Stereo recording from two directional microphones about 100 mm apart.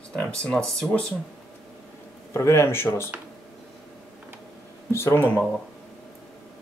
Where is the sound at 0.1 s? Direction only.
10° left (ahead or behind).